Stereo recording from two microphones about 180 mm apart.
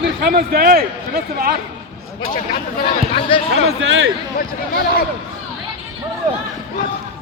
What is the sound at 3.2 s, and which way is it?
Speech, 30° left (ahead or behind).